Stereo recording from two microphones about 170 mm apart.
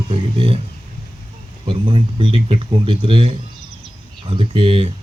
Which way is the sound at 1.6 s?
30° right (ahead or behind).